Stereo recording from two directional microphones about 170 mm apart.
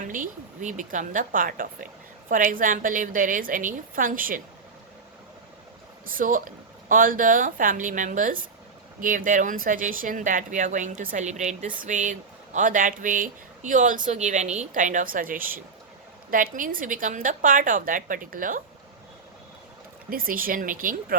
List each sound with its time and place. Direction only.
0.1 s speech: 50° right (ahead or behind)
6.1 s speech: 55° right (ahead or behind)
20.1 s speech: 55° right (ahead or behind)